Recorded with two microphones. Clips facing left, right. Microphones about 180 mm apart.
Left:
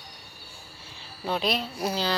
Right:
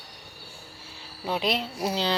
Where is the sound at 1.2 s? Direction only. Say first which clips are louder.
Even; 15° right (ahead or behind).